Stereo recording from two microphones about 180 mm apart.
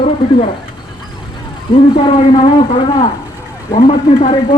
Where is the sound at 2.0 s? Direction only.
30° left (ahead or behind).